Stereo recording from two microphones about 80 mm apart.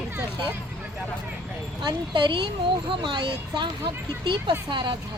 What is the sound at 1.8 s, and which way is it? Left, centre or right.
Speech, right.